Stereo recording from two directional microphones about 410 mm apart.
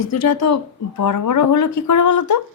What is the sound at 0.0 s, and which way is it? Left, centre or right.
Speech, left.